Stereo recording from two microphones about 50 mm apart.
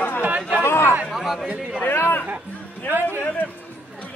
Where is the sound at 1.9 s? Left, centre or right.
Left.